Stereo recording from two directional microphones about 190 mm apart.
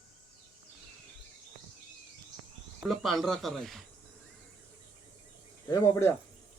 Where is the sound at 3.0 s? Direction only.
Centre (ahead or behind).